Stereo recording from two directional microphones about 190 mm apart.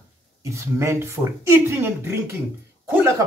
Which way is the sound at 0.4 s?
15° right (ahead or behind).